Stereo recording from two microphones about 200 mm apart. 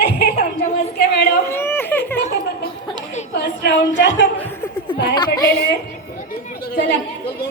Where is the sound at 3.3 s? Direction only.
60° left (ahead or behind).